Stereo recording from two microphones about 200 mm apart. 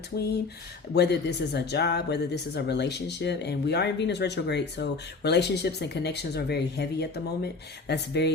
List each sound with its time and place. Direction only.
0.9 s speech: 55° left (ahead or behind)